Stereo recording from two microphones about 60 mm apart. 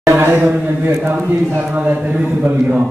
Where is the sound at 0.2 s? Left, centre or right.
Right.